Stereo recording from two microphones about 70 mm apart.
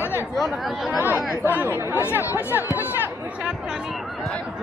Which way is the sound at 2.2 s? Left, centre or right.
Left.